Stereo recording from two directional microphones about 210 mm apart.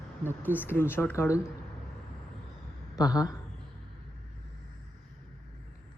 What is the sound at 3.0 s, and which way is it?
Speech, 15° left (ahead or behind).